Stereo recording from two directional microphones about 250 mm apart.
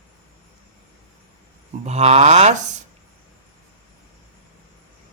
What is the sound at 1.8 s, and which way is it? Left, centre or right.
Speech, right.